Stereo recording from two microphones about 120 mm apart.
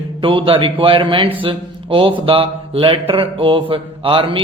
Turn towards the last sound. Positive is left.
turn(degrees=-45)  # may be behind; listen again after turning